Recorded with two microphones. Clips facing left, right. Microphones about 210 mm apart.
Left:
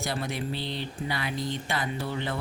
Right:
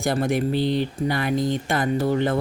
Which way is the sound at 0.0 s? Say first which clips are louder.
Right 10 dB; 50° right (ahead or behind).